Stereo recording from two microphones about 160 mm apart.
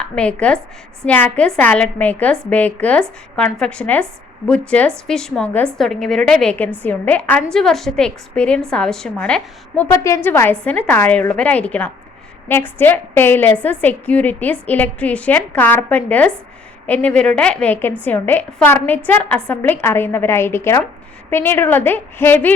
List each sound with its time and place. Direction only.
0.0 s a woman's voice: 5° left (ahead or behind)
9.9 s a woman's voice: 20° left (ahead or behind)